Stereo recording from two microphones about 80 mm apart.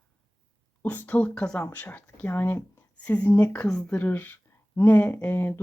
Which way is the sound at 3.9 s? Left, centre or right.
Left.